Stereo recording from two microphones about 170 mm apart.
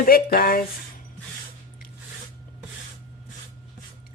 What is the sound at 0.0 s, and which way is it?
Speech, 60° left (ahead or behind).